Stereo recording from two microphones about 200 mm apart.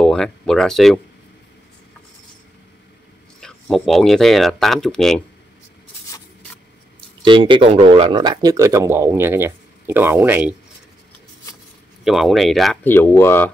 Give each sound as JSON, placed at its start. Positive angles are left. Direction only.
{"t": 0.0, "sound": "speech", "side_deg": 5}
{"t": 3.3, "sound": "speech", "side_deg": 5}
{"t": 7.2, "sound": "speech", "side_deg": -25}
{"t": 12.0, "sound": "speech", "side_deg": 0}